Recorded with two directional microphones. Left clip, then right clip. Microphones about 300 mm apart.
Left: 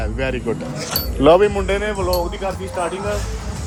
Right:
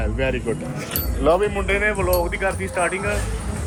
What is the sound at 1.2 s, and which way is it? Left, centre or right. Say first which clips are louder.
Speech: left 6 dB; left.